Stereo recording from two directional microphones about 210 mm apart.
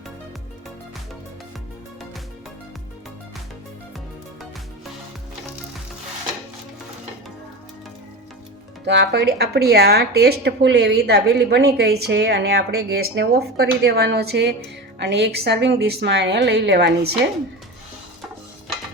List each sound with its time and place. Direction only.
8.8 s speech: 55° right (ahead or behind)